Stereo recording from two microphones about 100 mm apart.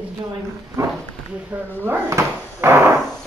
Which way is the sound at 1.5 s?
15° right (ahead or behind).